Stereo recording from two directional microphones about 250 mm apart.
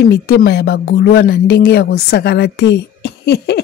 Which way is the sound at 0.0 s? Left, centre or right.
Left.